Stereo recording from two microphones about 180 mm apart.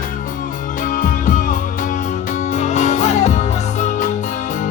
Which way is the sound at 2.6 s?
40° left (ahead or behind).